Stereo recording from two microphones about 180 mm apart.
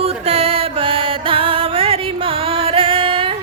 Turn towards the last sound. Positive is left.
turn(degrees=-30)  # may be behind; listen again after turning